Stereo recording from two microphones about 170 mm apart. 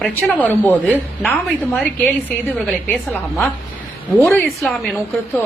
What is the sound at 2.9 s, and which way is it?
Speech, 5° left (ahead or behind).